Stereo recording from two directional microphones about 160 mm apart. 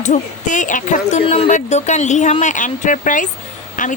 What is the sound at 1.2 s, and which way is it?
Speech, 35° left (ahead or behind).